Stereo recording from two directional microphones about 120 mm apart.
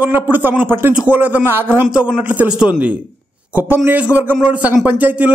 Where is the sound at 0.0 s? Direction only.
15° right (ahead or behind).